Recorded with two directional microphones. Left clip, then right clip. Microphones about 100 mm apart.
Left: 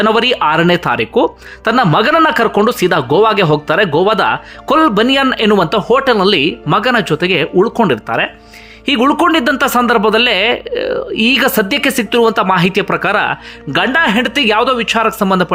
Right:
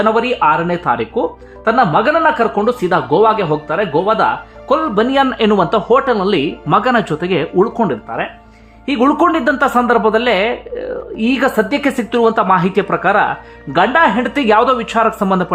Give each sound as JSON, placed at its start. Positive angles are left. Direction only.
{"t": 0.0, "sound": "a man's voice", "side_deg": 45}
{"t": 0.4, "sound": "speech", "side_deg": 70}
{"t": 0.9, "sound": "speech", "side_deg": 30}
{"t": 2.6, "sound": "speech", "side_deg": 35}
{"t": 4.9, "sound": "speech", "side_deg": 20}
{"t": 6.8, "sound": "speech", "side_deg": 0}
{"t": 8.1, "sound": "speech", "side_deg": 25}
{"t": 11.8, "sound": "speech", "side_deg": 15}
{"t": 14.2, "sound": "speech", "side_deg": 0}